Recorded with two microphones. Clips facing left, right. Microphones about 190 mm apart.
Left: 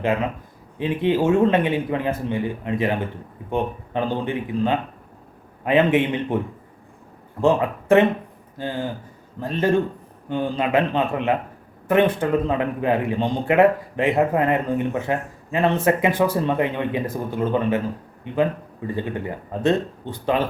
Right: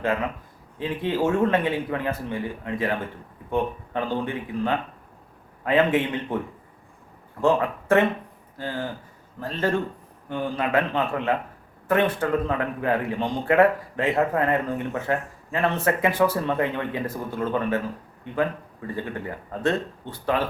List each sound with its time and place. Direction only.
0.0 s speech: 20° left (ahead or behind)
7.4 s a man's voice: 20° left (ahead or behind)